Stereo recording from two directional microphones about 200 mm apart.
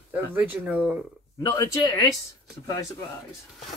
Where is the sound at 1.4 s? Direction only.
15° left (ahead or behind).